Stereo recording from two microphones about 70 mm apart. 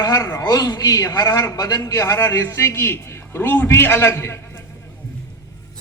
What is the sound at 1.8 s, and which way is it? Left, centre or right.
A man's voice, left.